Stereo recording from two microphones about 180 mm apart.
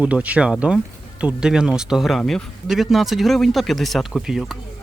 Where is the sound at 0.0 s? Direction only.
5° right (ahead or behind).